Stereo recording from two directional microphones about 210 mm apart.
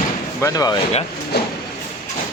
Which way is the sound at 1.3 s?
50° left (ahead or behind).